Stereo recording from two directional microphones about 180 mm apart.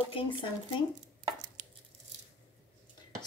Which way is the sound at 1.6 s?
40° right (ahead or behind).